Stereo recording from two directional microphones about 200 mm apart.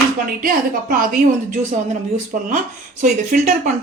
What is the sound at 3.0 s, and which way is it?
Speech, 40° right (ahead or behind).